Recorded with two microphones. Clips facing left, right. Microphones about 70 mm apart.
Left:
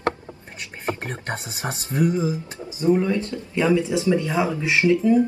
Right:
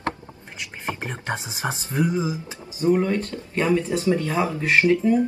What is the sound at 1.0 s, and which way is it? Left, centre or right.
Speech, centre.